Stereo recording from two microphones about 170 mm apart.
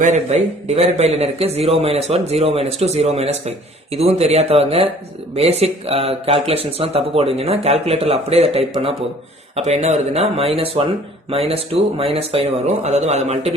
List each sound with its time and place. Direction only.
0.0 s speech: 45° right (ahead or behind)